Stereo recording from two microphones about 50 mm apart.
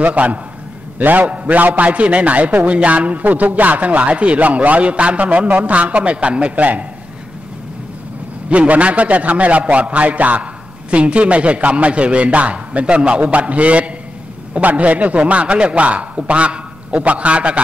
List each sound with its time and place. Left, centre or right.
0.0 s a man's voice: right
8.5 s a man's voice: right